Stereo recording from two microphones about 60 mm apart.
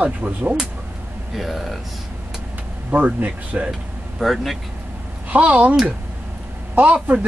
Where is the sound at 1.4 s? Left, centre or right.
Centre.